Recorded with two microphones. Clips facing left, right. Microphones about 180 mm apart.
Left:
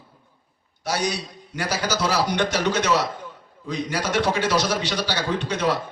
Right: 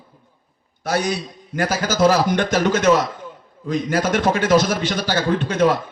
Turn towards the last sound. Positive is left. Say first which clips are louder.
# right 6 dB
turn(degrees=-50)  # may be behind; listen again after turning